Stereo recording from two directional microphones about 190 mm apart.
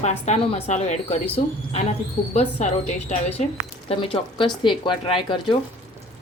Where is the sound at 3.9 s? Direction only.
25° left (ahead or behind).